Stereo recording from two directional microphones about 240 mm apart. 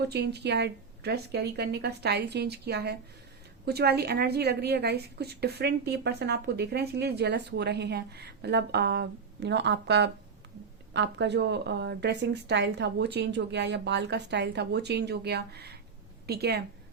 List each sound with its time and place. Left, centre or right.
0.1 s a woman's voice: right